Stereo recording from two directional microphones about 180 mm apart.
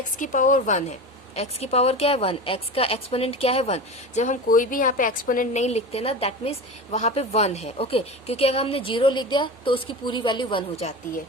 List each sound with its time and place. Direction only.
0.2 s a woman's voice: 45° left (ahead or behind)